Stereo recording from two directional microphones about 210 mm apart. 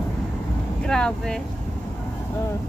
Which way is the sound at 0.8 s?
5° left (ahead or behind).